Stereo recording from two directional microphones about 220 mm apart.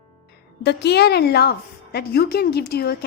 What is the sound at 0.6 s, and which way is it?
A woman's voice, 50° left (ahead or behind).